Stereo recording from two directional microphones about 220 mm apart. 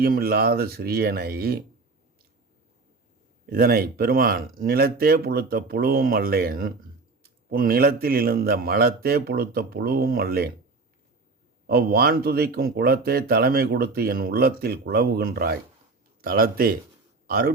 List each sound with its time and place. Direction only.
0.0 s speech: 45° right (ahead or behind)
3.4 s speech: 40° right (ahead or behind)
11.6 s a man's voice: 45° right (ahead or behind)